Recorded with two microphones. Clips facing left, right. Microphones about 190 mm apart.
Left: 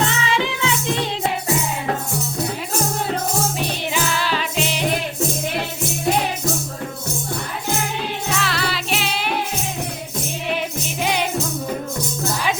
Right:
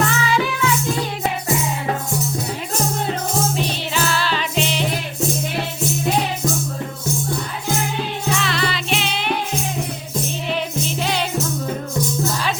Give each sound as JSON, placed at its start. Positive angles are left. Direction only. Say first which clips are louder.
{"t": 0.0, "sound": "music", "louder": "right 2 dB", "side_deg": 25}
{"t": 3.6, "sound": "music", "louder": "right 1 dB", "side_deg": 15}
{"t": 8.4, "sound": "music", "louder": "right 1 dB", "side_deg": 5}
{"t": 11.0, "sound": "music", "louder": "left 3 dB", "side_deg": 15}